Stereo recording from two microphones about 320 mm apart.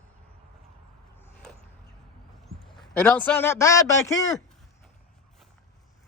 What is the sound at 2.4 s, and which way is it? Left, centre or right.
A man's voice, centre.